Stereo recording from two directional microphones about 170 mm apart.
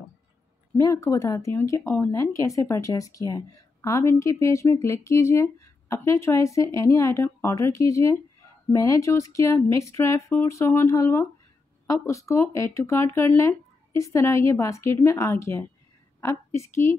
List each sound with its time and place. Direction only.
0.7 s a woman's voice: 20° left (ahead or behind)